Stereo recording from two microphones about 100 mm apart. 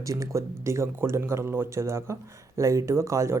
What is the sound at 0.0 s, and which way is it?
Speech, 35° right (ahead or behind).